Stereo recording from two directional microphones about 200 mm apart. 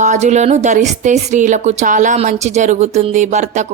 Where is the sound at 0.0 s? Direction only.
35° right (ahead or behind).